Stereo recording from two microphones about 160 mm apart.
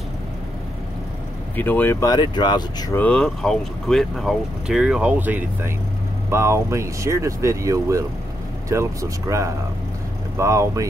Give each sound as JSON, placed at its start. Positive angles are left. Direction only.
{"t": 1.6, "sound": "speech", "side_deg": 10}
{"t": 3.0, "sound": "speech", "side_deg": 5}